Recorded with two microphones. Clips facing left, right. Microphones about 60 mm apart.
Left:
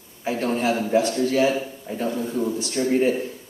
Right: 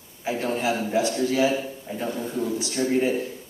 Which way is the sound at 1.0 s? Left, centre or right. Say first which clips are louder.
Left 2 dB; centre.